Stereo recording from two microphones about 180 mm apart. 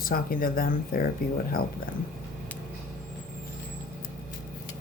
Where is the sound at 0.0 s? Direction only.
55° left (ahead or behind).